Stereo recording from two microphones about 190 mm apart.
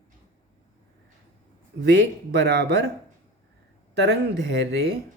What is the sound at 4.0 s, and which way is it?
Speech, 65° right (ahead or behind).